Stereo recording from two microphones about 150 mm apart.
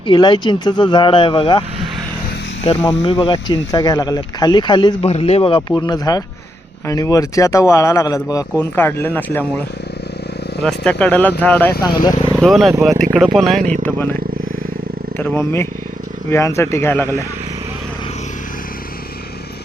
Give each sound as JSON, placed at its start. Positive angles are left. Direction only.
{"t": 0.1, "sound": "speech", "side_deg": 30}
{"t": 2.6, "sound": "speech", "side_deg": 45}
{"t": 3.2, "sound": "speech", "side_deg": 35}
{"t": 5.0, "sound": "speech", "side_deg": 45}
{"t": 10.6, "sound": "speech", "side_deg": 5}
{"t": 12.4, "sound": "speech", "side_deg": 0}
{"t": 13.8, "sound": "speech", "side_deg": 15}
{"t": 15.2, "sound": "speech", "side_deg": 15}